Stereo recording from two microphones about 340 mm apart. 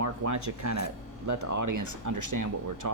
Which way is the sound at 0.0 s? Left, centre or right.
Right.